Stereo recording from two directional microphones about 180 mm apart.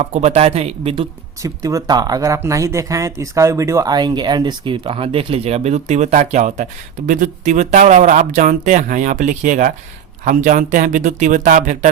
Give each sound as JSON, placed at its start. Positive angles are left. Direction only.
{"t": 0.0, "sound": "speech", "side_deg": -35}
{"t": 1.4, "sound": "speech", "side_deg": -20}